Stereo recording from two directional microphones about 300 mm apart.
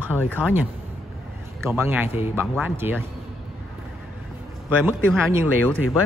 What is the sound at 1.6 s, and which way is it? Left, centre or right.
Speech, centre.